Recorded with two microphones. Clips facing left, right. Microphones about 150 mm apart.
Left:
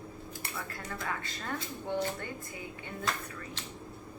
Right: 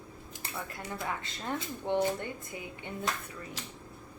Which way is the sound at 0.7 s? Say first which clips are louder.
Right 1 dB; 20° right (ahead or behind).